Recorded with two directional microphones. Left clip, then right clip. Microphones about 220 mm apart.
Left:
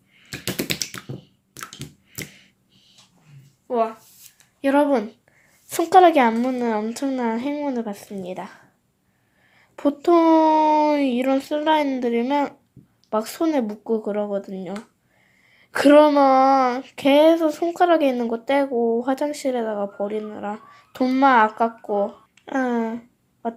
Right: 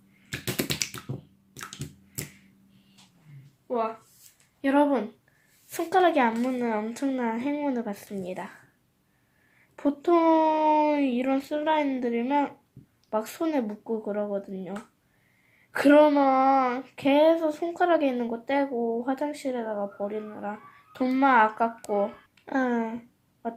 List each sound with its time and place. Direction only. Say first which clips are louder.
1.5 s a sound: left 4 dB; centre (ahead or behind)
3.7 s a woman's voice: left 6 dB; 30° left (ahead or behind); by 8.5 s 10° left (ahead or behind)
9.7 s a child's voice: left 6 dB; 20° left (ahead or behind)
15.7 s a child's voice: left 5 dB; 20° left (ahead or behind)